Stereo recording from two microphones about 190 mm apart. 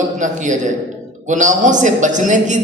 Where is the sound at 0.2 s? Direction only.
40° right (ahead or behind).